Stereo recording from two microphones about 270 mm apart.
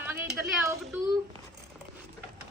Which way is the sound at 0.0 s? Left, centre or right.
Centre.